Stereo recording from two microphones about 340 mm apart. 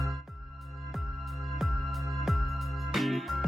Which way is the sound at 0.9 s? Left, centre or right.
Centre.